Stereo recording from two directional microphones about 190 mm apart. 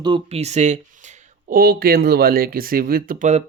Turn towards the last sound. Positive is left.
turn(degrees=-40)  # may be behind; listen again after turning